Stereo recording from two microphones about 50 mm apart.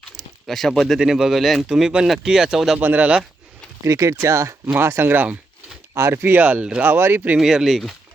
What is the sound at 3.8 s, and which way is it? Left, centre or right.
Speech, right.